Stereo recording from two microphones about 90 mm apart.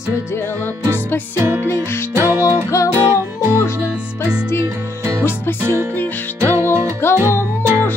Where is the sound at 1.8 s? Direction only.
30° left (ahead or behind).